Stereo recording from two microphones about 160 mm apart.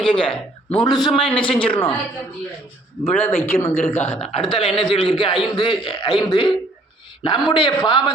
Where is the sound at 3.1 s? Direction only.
10° left (ahead or behind).